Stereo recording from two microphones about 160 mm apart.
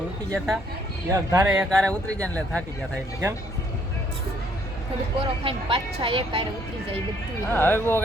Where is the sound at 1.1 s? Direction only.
20° right (ahead or behind).